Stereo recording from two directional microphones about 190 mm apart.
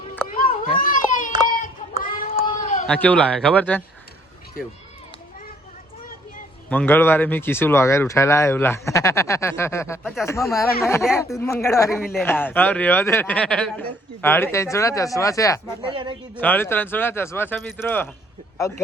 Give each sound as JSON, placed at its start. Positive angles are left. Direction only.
{"t": 0.3, "sound": "children playing", "side_deg": 45}
{"t": 1.5, "sound": "a sound", "side_deg": 50}
{"t": 2.8, "sound": "speech", "side_deg": 5}
{"t": 6.7, "sound": "speech", "side_deg": 10}
{"t": 11.9, "sound": "a man's voice", "side_deg": 0}
{"t": 12.2, "sound": "speech", "side_deg": 10}
{"t": 15.8, "sound": "speech", "side_deg": -25}
{"t": 16.4, "sound": "speech", "side_deg": 10}